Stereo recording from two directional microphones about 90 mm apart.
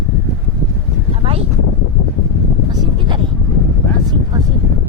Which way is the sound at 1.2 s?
90° right.